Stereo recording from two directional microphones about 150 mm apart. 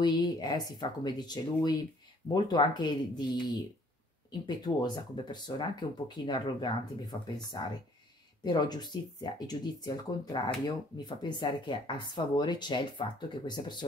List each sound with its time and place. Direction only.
0.0 s speech: 30° left (ahead or behind)